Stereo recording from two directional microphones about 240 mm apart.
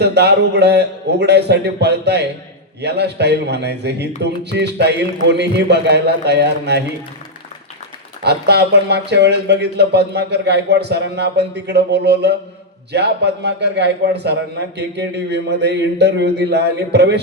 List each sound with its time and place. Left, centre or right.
0.0 s a man's voice: right
8.2 s a man's voice: right